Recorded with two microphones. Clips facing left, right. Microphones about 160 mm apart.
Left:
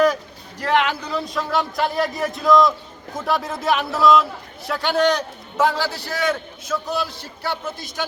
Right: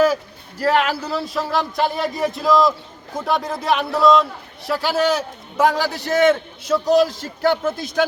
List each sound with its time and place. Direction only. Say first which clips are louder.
0.0 s a sound: right 1 dB; 5° right (ahead or behind)
0.9 s a man's voice: right 2 dB; 5° right (ahead or behind)
6.7 s a man's voice: right 9 dB; 35° right (ahead or behind)
7.4 s speech: right 9 dB; 50° right (ahead or behind)